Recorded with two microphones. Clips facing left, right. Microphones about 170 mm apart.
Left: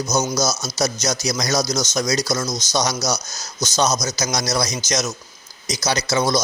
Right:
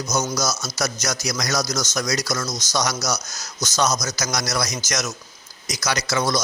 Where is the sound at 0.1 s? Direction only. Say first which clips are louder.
Left 2 dB; 20° left (ahead or behind).